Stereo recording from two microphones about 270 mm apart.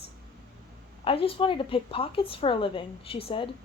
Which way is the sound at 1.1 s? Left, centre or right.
Centre.